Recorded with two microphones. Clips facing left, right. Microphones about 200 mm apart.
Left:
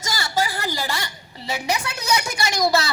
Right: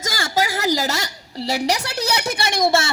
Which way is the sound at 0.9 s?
90° right.